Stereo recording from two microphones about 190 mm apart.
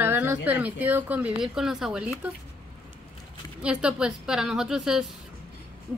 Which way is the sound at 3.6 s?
5° right (ahead or behind).